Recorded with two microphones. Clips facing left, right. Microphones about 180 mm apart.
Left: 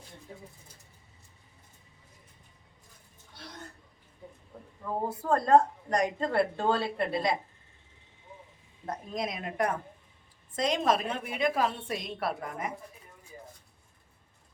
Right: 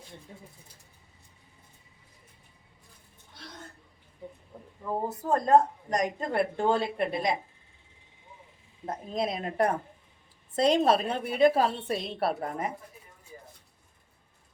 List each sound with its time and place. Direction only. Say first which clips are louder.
5.3 s a woman's voice: even; 20° right (ahead or behind)
8.9 s a woman's voice: right 3 dB; 30° right (ahead or behind)